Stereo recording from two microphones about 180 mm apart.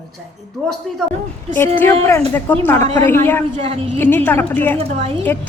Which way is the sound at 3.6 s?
30° right (ahead or behind).